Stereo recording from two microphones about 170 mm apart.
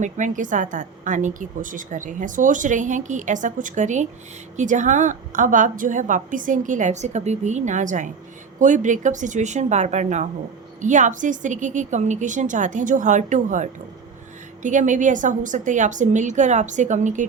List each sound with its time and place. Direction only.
0.0 s a woman's voice: 50° right (ahead or behind)